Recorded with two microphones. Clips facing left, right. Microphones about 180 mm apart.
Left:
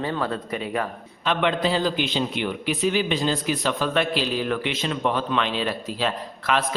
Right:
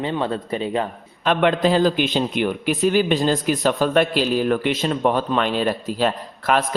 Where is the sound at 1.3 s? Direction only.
50° right (ahead or behind).